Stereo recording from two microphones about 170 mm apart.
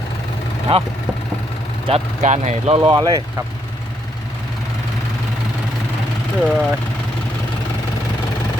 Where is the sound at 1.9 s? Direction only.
45° right (ahead or behind); by 3.2 s 25° right (ahead or behind).